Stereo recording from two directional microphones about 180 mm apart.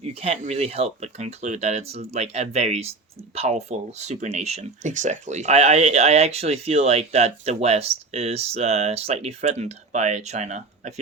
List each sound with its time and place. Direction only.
0.0 s speech: 35° right (ahead or behind)